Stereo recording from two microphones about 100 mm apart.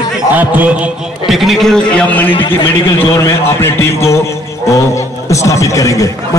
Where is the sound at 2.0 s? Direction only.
15° left (ahead or behind).